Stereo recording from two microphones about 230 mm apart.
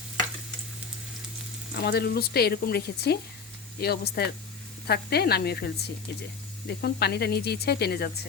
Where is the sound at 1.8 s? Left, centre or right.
Left.